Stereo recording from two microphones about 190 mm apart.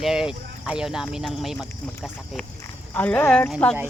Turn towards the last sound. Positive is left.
turn(degrees=5)  # may be behind; listen again after turning